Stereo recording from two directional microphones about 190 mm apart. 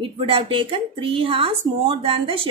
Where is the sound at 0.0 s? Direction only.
30° right (ahead or behind).